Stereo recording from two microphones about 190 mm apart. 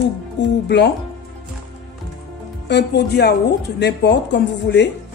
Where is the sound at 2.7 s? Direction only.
60° left (ahead or behind).